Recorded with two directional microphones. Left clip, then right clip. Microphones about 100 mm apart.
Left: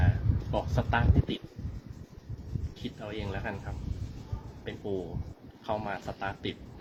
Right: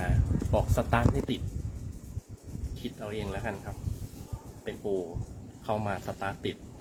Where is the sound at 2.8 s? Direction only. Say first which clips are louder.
Right 2 dB; 25° right (ahead or behind).